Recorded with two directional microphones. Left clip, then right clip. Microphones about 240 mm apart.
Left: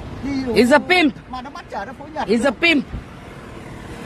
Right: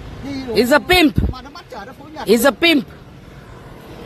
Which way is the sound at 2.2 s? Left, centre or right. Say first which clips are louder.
Right 4 dB; right.